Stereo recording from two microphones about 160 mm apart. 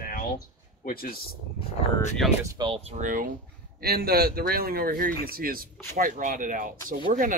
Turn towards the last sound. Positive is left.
turn(degrees=-55)  # may be behind; listen again after turning